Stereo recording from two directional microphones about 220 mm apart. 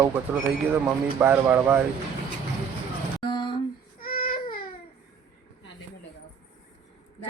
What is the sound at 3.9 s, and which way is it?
Baby cry, 40° left (ahead or behind).